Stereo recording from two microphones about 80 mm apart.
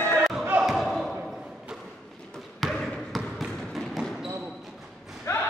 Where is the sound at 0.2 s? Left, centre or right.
Centre.